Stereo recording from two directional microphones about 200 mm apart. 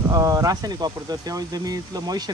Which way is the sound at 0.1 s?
15° right (ahead or behind).